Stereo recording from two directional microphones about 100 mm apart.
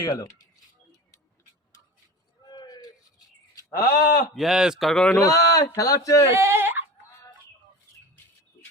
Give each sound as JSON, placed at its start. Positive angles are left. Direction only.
{"t": 0.0, "sound": "speech", "side_deg": 35}
{"t": 2.5, "sound": "a sound", "side_deg": 45}
{"t": 3.5, "sound": "speech", "side_deg": 35}
{"t": 4.4, "sound": "speech", "side_deg": -5}
{"t": 5.1, "sound": "speech", "side_deg": 35}
{"t": 6.2, "sound": "a sound", "side_deg": -30}